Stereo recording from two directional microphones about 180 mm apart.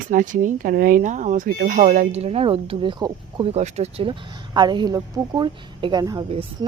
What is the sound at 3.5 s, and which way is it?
Speech, 35° right (ahead or behind).